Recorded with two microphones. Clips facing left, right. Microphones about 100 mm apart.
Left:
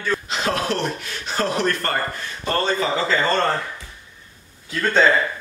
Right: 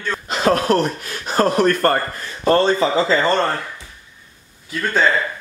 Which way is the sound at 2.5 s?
30° right (ahead or behind).